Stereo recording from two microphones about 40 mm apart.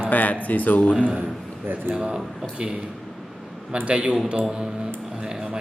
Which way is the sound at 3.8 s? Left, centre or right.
Right.